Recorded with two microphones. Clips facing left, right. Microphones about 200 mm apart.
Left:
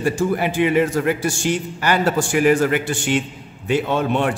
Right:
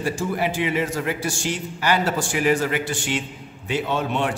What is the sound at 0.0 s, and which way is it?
A man's voice, 55° left (ahead or behind).